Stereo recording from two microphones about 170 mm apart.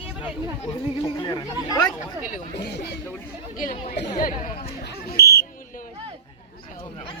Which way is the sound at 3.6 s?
50° left (ahead or behind).